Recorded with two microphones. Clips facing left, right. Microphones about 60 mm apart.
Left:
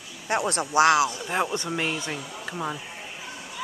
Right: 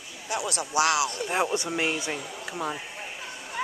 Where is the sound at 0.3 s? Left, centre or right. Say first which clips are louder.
Left 4 dB; left.